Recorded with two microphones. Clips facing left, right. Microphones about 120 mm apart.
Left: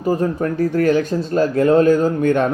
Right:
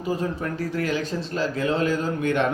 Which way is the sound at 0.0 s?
50° left (ahead or behind).